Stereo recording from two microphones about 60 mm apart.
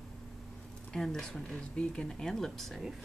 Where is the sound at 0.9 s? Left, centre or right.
Centre.